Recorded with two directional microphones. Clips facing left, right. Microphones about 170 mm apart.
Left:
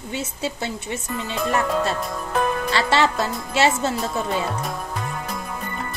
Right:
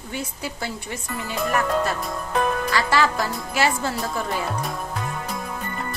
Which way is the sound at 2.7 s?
25° left (ahead or behind).